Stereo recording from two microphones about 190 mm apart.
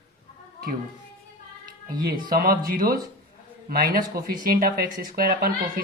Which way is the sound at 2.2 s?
50° right (ahead or behind).